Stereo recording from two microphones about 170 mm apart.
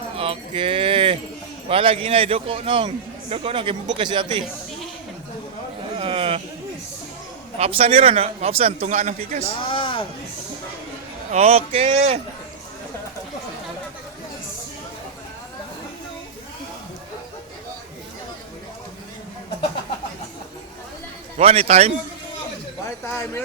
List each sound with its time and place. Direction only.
0.2 s a man's voice: 30° right (ahead or behind)
6.0 s a sound: 35° right (ahead or behind)
7.6 s a man's voice: 35° right (ahead or behind)
9.6 s a sound: 30° left (ahead or behind)
11.3 s a man's voice: 35° right (ahead or behind)
21.3 s a man's voice: 35° right (ahead or behind)
23.0 s a man's voice: 15° left (ahead or behind)